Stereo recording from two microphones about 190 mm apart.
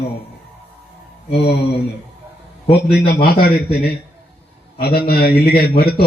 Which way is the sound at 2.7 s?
55° left (ahead or behind).